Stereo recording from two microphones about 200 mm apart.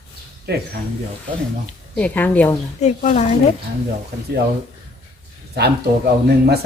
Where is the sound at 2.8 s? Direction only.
35° left (ahead or behind).